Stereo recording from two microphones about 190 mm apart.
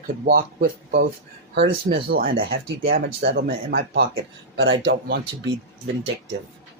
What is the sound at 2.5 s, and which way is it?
Speech, 65° right (ahead or behind).